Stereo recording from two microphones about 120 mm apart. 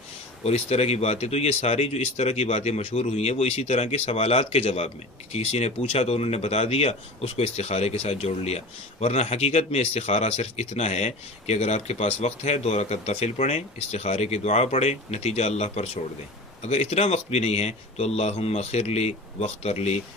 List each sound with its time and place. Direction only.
0.4 s speech: 65° left (ahead or behind)